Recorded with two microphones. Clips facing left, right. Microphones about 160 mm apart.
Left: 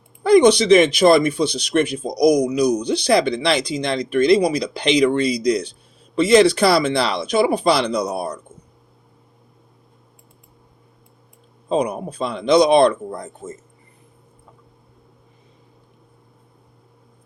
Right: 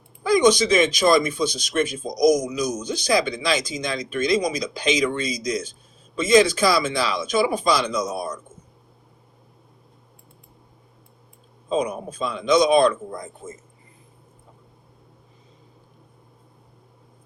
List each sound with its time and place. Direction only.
0.2 s speech: 65° left (ahead or behind)
11.7 s speech: 65° left (ahead or behind)